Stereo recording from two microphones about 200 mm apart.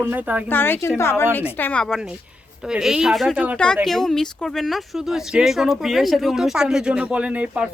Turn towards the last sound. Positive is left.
turn(degrees=-5)  # may be behind; listen again after turning